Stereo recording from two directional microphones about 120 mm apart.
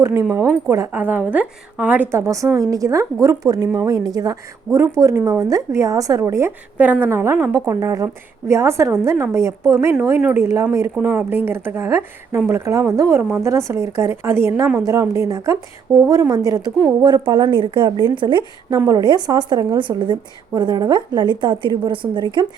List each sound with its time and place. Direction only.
0.0 s a woman's voice: 25° right (ahead or behind)
2.2 s a woman's voice: 25° right (ahead or behind)
6.7 s a woman's voice: 15° right (ahead or behind); by 18.4 s 40° right (ahead or behind)
18.7 s speech: 25° right (ahead or behind)